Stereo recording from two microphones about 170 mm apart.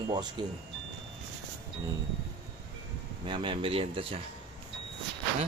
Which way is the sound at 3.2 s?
25° right (ahead or behind).